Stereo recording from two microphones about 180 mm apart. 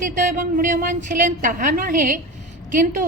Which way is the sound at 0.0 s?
45° right (ahead or behind).